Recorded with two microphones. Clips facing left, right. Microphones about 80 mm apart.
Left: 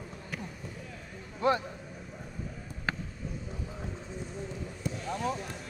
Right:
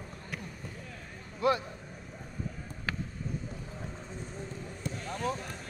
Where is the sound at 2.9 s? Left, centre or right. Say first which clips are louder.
Left 2 dB; left.